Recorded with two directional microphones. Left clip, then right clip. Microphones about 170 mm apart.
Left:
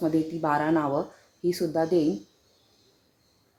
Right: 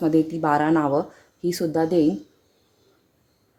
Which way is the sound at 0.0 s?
75° right (ahead or behind).